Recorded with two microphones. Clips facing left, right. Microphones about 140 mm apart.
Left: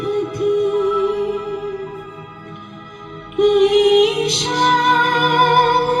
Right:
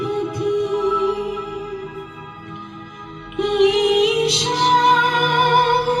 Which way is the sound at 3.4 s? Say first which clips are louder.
Left 4 dB; 50° left (ahead or behind).